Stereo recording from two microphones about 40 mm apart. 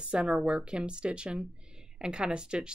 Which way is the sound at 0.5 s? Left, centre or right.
Right.